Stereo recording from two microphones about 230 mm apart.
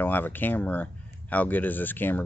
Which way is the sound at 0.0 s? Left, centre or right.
Centre.